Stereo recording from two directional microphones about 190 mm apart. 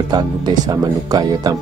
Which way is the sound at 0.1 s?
20° right (ahead or behind).